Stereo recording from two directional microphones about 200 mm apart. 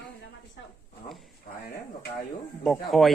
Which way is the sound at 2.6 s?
Centre (ahead or behind).